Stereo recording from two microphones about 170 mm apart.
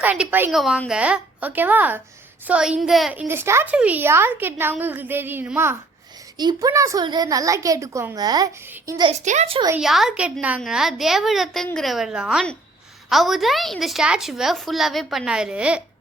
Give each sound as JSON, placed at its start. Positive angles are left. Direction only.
{"t": 0.0, "sound": "a woman's voice", "side_deg": -10}
{"t": 6.3, "sound": "a woman's voice", "side_deg": -25}
{"t": 9.7, "sound": "a woman's voice", "side_deg": 0}